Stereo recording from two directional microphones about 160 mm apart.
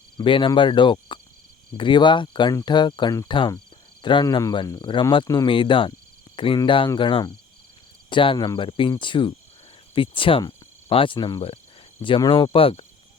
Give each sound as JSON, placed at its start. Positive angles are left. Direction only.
{"t": 0.2, "sound": "cricket", "side_deg": 30}
{"t": 1.7, "sound": "speech", "side_deg": 30}
{"t": 6.3, "sound": "cricket", "side_deg": 30}
{"t": 9.9, "sound": "speech", "side_deg": 35}
{"t": 12.0, "sound": "cricket", "side_deg": 30}